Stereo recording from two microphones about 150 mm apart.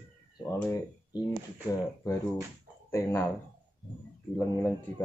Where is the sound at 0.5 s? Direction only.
20° left (ahead or behind).